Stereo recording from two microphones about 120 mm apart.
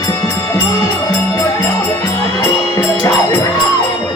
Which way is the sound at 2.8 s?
20° left (ahead or behind).